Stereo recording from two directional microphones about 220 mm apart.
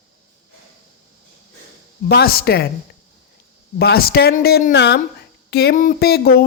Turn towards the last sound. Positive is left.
turn(degrees=45)  # may be behind; listen again after turning